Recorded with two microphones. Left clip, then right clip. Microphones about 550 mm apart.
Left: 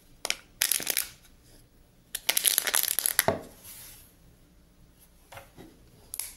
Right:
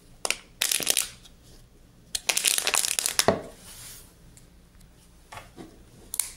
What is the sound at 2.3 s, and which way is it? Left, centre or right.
Crumpling, left.